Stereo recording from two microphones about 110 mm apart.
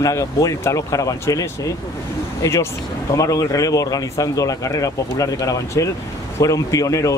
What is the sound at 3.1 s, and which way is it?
Speech, 30° left (ahead or behind).